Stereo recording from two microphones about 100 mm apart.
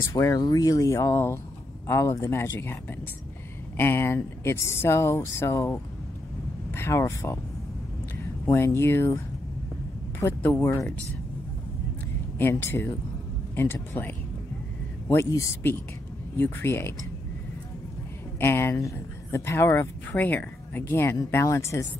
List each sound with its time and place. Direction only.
0.0 s speech: 35° left (ahead or behind)
8.5 s speech: 30° left (ahead or behind)
10.2 s speech: 25° left (ahead or behind)
12.4 s speech: 20° left (ahead or behind)
18.4 s speech: 25° left (ahead or behind)
20.1 s speech: 15° left (ahead or behind)